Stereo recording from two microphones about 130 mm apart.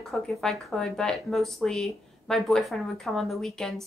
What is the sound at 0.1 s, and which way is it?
Speech, centre (ahead or behind).